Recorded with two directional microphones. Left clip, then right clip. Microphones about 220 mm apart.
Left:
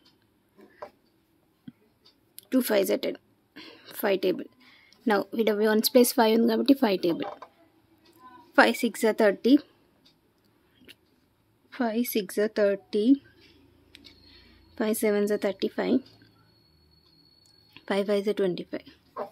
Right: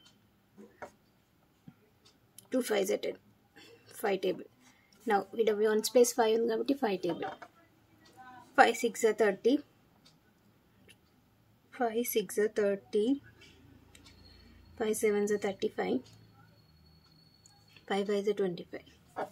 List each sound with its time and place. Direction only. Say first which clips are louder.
2.3 s a woman's voice: left 6 dB; 45° left (ahead or behind)
8.5 s a woman's voice: left 4 dB; 45° left (ahead or behind)
11.7 s speech: left 3 dB; 40° left (ahead or behind)
14.8 s a woman's voice: left 4 dB; 40° left (ahead or behind)
17.8 s speech: left 5 dB; 40° left (ahead or behind)